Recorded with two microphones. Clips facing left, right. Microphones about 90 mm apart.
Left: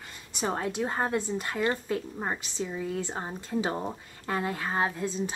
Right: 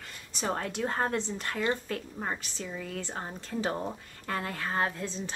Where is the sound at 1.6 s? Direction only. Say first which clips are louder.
Left 2 dB; 20° left (ahead or behind).